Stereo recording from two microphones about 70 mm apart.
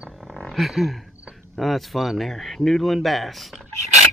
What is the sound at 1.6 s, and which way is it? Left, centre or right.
Speech, centre.